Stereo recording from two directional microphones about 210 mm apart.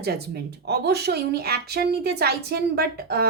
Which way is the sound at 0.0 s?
50° right (ahead or behind).